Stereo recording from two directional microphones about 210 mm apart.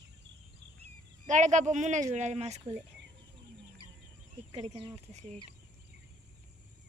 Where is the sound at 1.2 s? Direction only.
35° right (ahead or behind).